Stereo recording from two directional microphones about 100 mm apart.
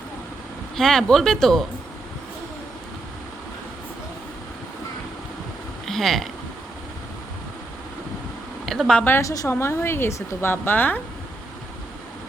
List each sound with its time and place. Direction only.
0.8 s speech: 5° left (ahead or behind)
5.8 s a sound: 5° left (ahead or behind)
8.6 s speech: centre (ahead or behind)
9.2 s a woman's voice: 35° left (ahead or behind)